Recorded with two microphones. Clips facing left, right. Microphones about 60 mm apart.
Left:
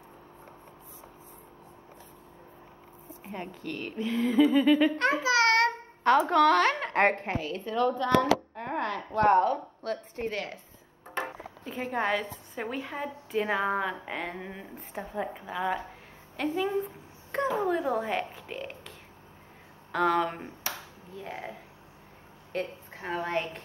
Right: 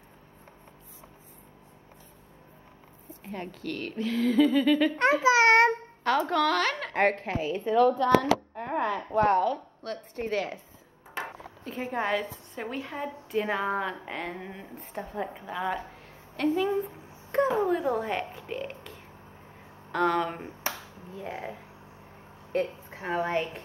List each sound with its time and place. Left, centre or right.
3.1 s speech: centre
5.2 s a child's voice: right
6.0 s a woman's voice: left
7.3 s a woman's voice: centre
9.3 s speech: left
9.8 s a woman's voice: centre
11.6 s a woman's voice: centre
16.8 s a sound: centre
17.6 s a woman's voice: centre
22.5 s a sound: centre
23.3 s a woman's voice: centre